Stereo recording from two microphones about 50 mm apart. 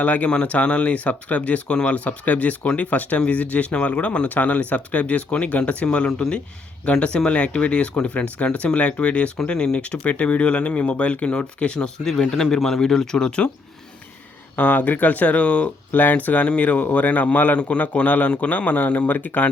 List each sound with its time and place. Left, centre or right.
0.0 s speech: left
9.4 s speech: centre
12.3 s speech: centre
14.5 s speech: left
15.9 s speech: left